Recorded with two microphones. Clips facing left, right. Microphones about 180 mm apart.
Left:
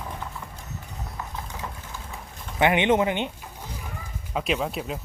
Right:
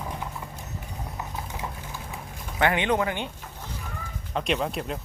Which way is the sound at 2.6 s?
20° left (ahead or behind).